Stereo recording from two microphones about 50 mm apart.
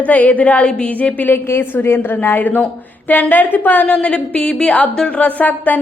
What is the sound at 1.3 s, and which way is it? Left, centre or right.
A woman's voice, left.